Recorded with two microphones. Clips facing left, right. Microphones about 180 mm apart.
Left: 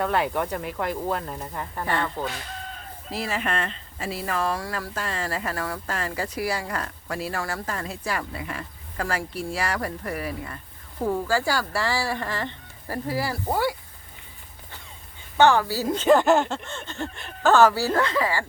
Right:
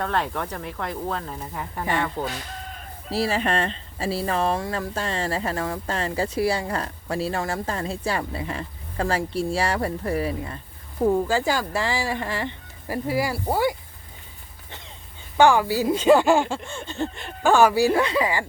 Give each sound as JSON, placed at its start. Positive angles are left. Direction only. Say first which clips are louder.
{"t": 0.0, "sound": "speech", "louder": "left 2 dB", "side_deg": 5}
{"t": 3.1, "sound": "speech", "louder": "right 5 dB", "side_deg": -30}
{"t": 15.4, "sound": "speech", "louder": "right 2 dB", "side_deg": -15}